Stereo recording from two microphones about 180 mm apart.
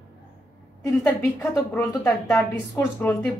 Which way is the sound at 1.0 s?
20° left (ahead or behind).